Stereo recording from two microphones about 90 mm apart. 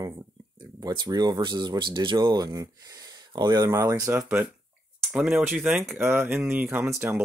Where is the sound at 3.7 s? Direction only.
30° right (ahead or behind).